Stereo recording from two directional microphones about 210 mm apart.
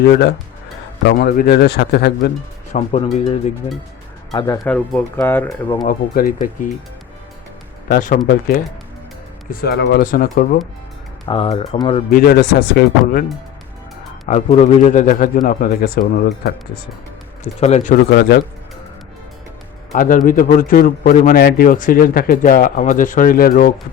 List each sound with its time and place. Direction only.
0.0 s speech: 50° left (ahead or behind)
2.7 s speech: 30° left (ahead or behind); by 5.5 s 10° left (ahead or behind)
5.6 s speech: 25° left (ahead or behind)
5.9 s a man's voice: 40° left (ahead or behind)
7.9 s a man's voice: 40° left (ahead or behind)
11.3 s speech: 25° left (ahead or behind)
12.1 s speech: 45° left (ahead or behind)
14.3 s a man's voice: 35° left (ahead or behind)
17.4 s a man's voice: 35° left (ahead or behind)
18.1 s speech: 55° left (ahead or behind)
19.9 s a man's voice: 40° left (ahead or behind)